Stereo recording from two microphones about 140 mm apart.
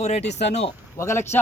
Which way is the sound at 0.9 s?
20° left (ahead or behind).